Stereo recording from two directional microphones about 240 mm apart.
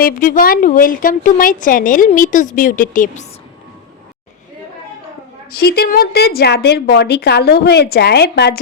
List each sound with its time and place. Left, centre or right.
0.0 s a woman's voice: left
5.5 s a woman's voice: left